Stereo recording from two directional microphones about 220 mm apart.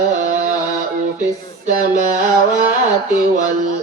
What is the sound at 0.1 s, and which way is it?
Music, 35° right (ahead or behind).